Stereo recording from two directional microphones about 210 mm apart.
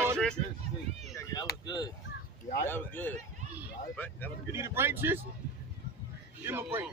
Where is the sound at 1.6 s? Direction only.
20° left (ahead or behind).